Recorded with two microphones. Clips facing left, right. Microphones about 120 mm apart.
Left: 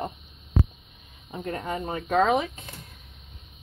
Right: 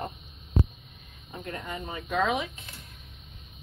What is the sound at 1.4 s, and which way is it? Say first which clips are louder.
Speech: left 6 dB; 35° left (ahead or behind).